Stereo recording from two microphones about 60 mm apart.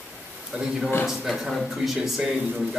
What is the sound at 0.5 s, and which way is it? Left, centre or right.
Speech, centre.